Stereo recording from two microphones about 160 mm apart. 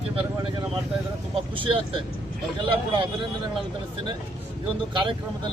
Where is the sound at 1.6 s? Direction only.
35° right (ahead or behind).